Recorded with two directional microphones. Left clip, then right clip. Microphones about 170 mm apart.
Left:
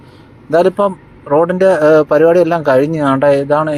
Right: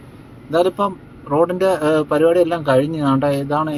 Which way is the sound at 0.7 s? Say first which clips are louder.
Left 6 dB; 20° left (ahead or behind).